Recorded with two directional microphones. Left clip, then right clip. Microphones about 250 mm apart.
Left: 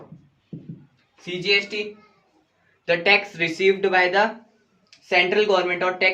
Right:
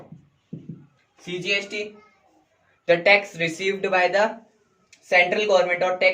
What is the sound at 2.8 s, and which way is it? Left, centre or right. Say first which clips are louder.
Speech: right 1 dB; left.